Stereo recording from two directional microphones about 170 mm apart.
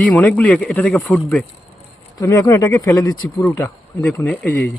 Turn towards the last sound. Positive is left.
turn(degrees=10)  # may be behind; listen again after turning